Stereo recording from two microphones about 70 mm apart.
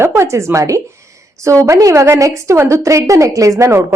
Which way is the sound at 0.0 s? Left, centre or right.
Right.